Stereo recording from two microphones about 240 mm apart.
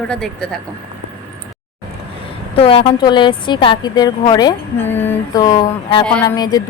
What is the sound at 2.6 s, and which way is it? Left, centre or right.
A woman's voice, left.